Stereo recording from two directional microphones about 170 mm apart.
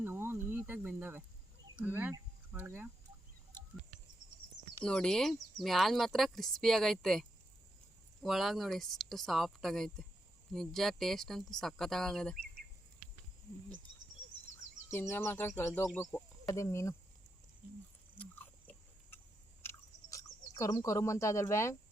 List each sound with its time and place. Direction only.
0.0 s insect: 15° right (ahead or behind)
1.8 s speech: 10° right (ahead or behind)
4.8 s speech: 5° left (ahead or behind)
14.8 s speech: 15° left (ahead or behind)
18.2 s a sound: 10° left (ahead or behind)